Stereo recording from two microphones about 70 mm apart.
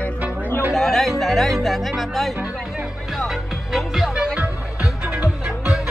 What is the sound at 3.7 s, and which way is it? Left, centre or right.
Music, centre.